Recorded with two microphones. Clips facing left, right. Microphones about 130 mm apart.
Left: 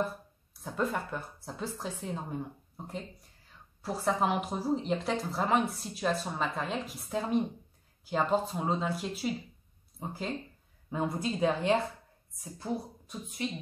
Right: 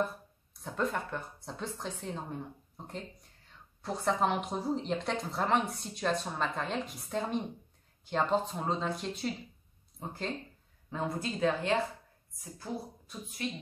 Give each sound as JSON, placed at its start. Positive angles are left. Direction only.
{"t": 0.7, "sound": "speech", "side_deg": 5}
{"t": 10.9, "sound": "speech", "side_deg": 15}